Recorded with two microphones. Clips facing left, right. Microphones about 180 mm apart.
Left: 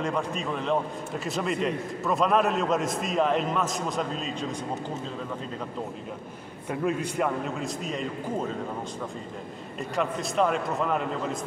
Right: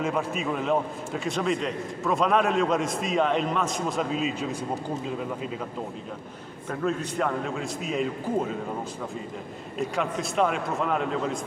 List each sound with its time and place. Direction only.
0.0 s a man's voice: 5° right (ahead or behind)
6.7 s a man's voice: 10° left (ahead or behind)
9.8 s a man's voice: centre (ahead or behind)